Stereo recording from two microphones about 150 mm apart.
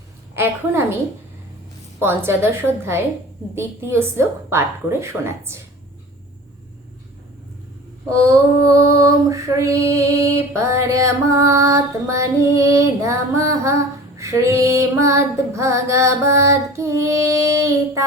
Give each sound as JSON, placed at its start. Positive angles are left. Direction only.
{"t": 0.3, "sound": "a woman's voice", "side_deg": -15}
{"t": 2.0, "sound": "a woman's voice", "side_deg": -15}
{"t": 8.6, "sound": "music", "side_deg": -20}